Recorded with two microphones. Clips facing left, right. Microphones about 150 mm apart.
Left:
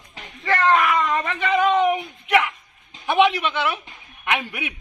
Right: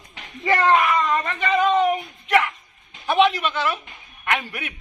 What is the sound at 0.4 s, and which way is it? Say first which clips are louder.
Speech: right 2 dB; 25° right (ahead or behind).